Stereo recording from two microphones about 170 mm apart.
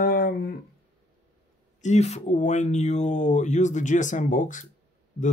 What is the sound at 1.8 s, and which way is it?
Speech, 40° left (ahead or behind).